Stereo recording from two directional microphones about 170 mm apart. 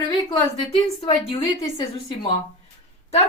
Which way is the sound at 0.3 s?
30° left (ahead or behind).